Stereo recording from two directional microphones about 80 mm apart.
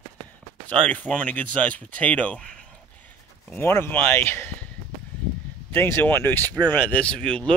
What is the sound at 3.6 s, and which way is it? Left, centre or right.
Speech, left.